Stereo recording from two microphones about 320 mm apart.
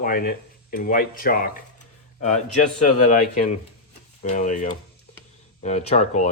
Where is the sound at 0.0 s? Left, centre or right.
Left.